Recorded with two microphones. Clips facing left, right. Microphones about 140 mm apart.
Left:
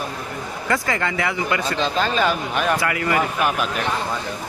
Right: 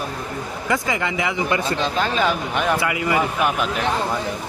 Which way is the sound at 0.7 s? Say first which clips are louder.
Even; 15° right (ahead or behind).